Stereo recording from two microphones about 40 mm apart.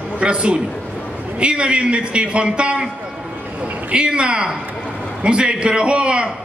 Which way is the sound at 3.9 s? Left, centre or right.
Right.